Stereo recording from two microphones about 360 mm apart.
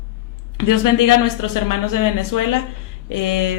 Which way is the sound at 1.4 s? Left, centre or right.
Left.